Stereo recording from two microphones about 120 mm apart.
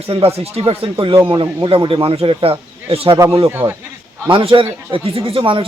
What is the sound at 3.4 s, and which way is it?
Speech, 25° right (ahead or behind).